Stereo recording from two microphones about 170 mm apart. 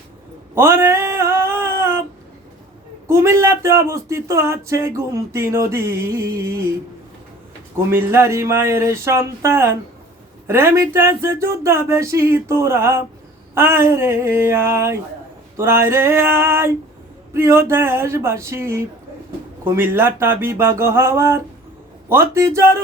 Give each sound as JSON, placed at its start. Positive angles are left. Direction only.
{"t": 0.5, "sound": "a sound", "side_deg": -15}
{"t": 3.1, "sound": "speech", "side_deg": -15}
{"t": 7.8, "sound": "speech", "side_deg": -15}